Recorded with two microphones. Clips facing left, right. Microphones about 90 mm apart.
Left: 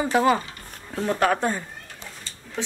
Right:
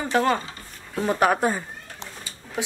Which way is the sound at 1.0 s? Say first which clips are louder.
Right 1 dB; 10° right (ahead or behind).